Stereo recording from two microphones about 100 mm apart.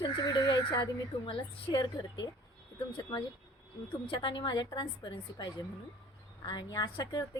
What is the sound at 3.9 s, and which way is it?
A woman's voice, 50° left (ahead or behind).